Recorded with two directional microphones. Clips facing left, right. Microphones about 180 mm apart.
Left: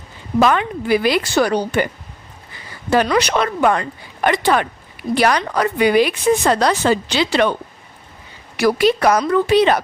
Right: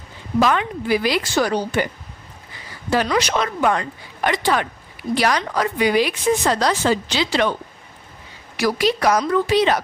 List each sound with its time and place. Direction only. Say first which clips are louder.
0.3 s speech: left 3 dB; 55° left (ahead or behind)
2.9 s speech: left 3 dB; 60° left (ahead or behind)
8.5 s speech: left 4 dB; 55° left (ahead or behind)